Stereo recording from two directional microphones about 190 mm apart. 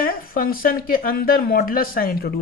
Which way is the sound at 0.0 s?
50° left (ahead or behind).